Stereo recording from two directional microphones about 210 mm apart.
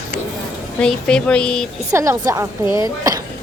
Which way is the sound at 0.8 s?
5° left (ahead or behind).